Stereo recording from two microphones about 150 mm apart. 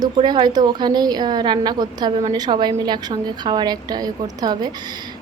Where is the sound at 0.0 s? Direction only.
30° right (ahead or behind).